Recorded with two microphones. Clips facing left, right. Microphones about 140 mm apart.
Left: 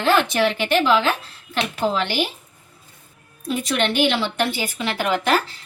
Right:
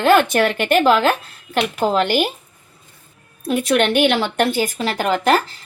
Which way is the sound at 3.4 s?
60° right (ahead or behind).